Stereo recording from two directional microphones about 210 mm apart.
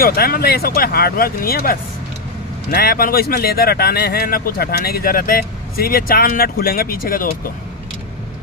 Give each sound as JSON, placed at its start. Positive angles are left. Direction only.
{"t": 0.0, "sound": "speech", "side_deg": 45}